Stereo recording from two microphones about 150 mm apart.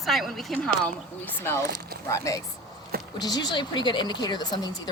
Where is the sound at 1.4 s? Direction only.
15° left (ahead or behind).